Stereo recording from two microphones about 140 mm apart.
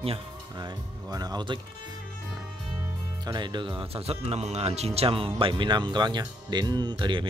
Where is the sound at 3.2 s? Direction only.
30° right (ahead or behind).